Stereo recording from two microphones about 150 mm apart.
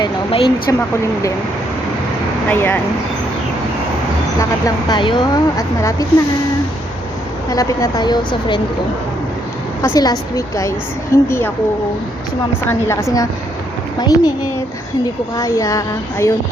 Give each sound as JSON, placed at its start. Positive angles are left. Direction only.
{"t": 0.0, "sound": "speech", "side_deg": 35}
{"t": 2.5, "sound": "a woman's voice", "side_deg": 10}
{"t": 4.4, "sound": "speech", "side_deg": 25}
{"t": 7.5, "sound": "speech", "side_deg": 20}
{"t": 9.8, "sound": "a woman's voice", "side_deg": 25}
{"t": 12.6, "sound": "speech", "side_deg": 20}
{"t": 15.4, "sound": "speech", "side_deg": 20}